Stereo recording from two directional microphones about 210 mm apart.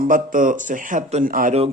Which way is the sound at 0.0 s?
40° right (ahead or behind).